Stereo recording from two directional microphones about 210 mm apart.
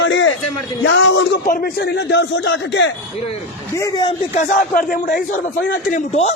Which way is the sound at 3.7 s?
20° left (ahead or behind).